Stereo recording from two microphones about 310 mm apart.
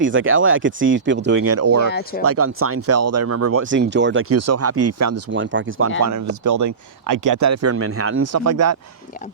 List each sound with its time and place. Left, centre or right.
0.0 s speech: right
1.9 s speech: left
2.2 s speech: right
5.3 s speech: right
6.1 s speech: right
8.4 s speech: right